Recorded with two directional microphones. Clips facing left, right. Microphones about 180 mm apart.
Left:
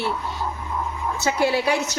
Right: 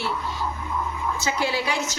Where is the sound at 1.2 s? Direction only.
60° left (ahead or behind).